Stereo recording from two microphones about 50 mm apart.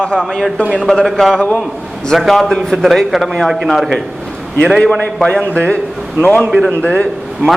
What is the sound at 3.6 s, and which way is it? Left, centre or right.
Speech, centre.